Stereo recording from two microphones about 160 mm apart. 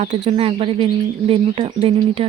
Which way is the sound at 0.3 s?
35° right (ahead or behind).